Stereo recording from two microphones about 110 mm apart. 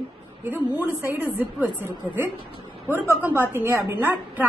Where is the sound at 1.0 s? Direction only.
15° right (ahead or behind).